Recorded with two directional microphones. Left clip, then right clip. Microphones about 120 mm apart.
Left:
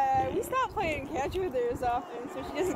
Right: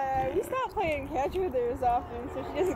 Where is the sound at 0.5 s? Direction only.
40° left (ahead or behind).